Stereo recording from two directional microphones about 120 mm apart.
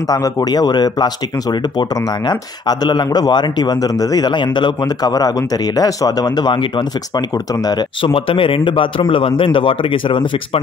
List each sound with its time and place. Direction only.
0.1 s speech: 35° left (ahead or behind)